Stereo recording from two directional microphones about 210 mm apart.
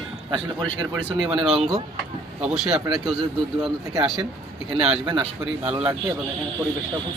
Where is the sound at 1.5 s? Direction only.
Centre (ahead or behind).